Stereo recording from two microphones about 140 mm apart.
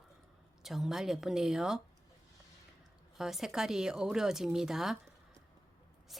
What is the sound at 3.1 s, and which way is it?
A woman's voice, 5° right (ahead or behind).